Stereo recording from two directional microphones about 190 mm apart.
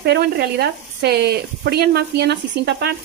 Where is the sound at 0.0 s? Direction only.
60° right (ahead or behind).